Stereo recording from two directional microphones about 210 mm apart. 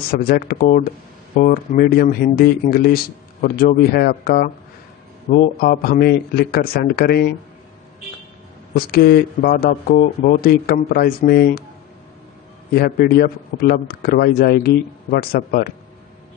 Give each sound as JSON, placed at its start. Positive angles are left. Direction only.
{"t": 0.1, "sound": "speech", "side_deg": 45}
{"t": 8.7, "sound": "speech", "side_deg": 45}
{"t": 12.7, "sound": "speech", "side_deg": 45}